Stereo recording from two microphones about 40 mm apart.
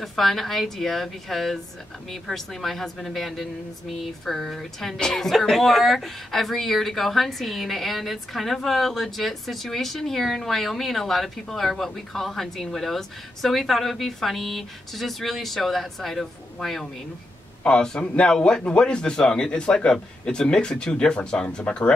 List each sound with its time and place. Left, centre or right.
0.0 s a woman's voice: centre
5.3 s speech: centre
17.6 s a man's voice: left